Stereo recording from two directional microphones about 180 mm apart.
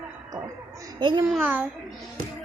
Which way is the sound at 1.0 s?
25° right (ahead or behind).